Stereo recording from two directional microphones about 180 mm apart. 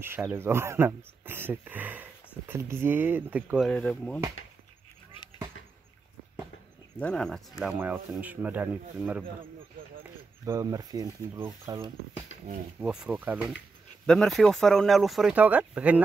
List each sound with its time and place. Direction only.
0.0 s speech: 10° right (ahead or behind)
3.5 s speech: centre (ahead or behind)
7.0 s speech: 5° left (ahead or behind)
7.6 s speech: 10° right (ahead or behind)
10.4 s speech: 20° right (ahead or behind)
12.8 s speech: 5° right (ahead or behind)
14.0 s speech: 5° left (ahead or behind)